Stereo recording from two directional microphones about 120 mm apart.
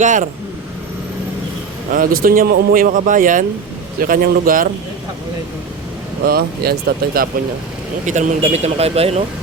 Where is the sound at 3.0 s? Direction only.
90° right.